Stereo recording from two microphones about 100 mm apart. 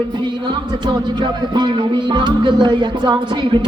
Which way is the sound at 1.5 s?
50° right (ahead or behind).